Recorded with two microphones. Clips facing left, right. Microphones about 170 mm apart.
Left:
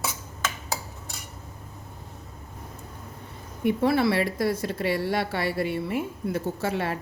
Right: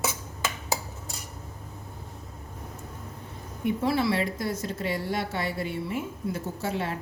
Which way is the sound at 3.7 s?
60° left (ahead or behind).